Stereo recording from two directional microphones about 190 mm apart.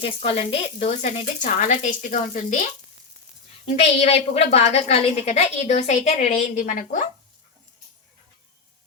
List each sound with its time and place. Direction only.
0.0 s a woman's voice: 30° left (ahead or behind)
4.0 s a woman's voice: 30° left (ahead or behind)